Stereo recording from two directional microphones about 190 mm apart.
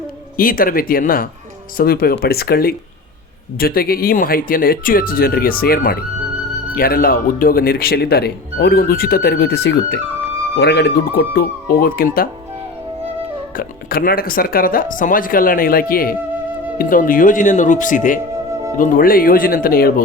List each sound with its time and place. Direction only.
0.3 s speech: 50° left (ahead or behind)
13.6 s speech: 50° left (ahead or behind)